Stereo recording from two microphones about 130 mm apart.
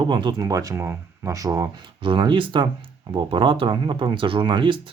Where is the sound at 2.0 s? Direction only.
40° right (ahead or behind).